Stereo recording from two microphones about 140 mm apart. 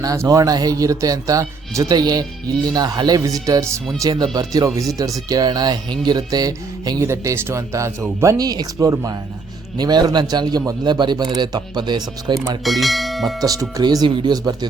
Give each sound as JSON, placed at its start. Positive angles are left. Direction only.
{"t": 0.0, "sound": "speech", "side_deg": -25}
{"t": 12.6, "sound": "speech", "side_deg": 0}
{"t": 13.4, "sound": "speech", "side_deg": -25}